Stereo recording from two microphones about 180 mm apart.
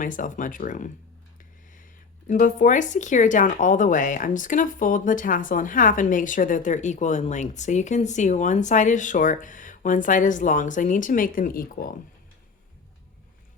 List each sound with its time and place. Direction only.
0.0 s speech: 45° left (ahead or behind)